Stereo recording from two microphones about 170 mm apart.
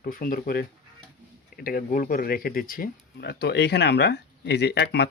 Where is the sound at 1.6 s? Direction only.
55° left (ahead or behind).